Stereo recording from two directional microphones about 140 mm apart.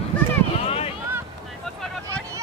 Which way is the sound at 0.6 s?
45° left (ahead or behind).